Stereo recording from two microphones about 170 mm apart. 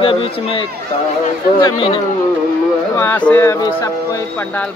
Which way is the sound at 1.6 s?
30° left (ahead or behind).